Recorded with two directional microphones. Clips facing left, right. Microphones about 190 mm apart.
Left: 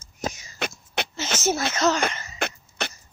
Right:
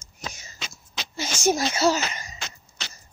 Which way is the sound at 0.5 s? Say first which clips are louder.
Left 9 dB; 60° left (ahead or behind).